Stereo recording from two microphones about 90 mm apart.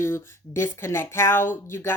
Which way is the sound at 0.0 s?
30° left (ahead or behind).